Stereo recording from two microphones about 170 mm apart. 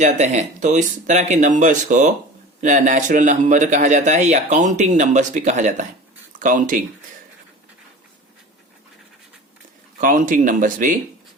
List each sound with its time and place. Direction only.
0.0 s speech: 45° right (ahead or behind)
10.0 s speech: 55° right (ahead or behind)